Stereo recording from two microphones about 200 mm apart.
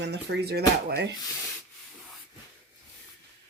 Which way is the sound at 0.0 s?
55° right (ahead or behind).